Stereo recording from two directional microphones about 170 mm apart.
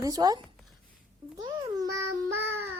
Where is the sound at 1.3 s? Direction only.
20° right (ahead or behind).